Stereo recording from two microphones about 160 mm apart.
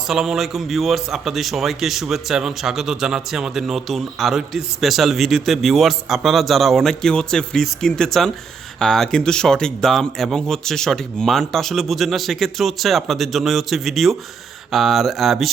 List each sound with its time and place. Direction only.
0.1 s a man's voice: centre (ahead or behind)